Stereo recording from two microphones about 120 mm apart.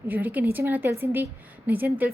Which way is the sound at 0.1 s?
15° right (ahead or behind).